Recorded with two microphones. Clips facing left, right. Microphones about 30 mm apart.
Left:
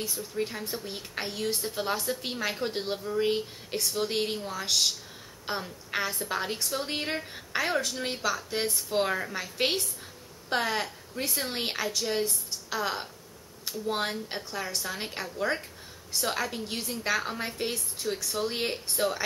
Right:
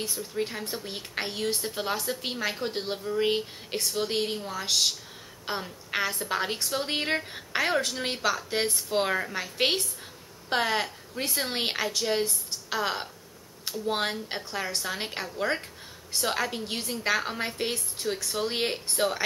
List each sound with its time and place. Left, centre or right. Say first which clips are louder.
0.0 s a woman's voice: right 1 dB; centre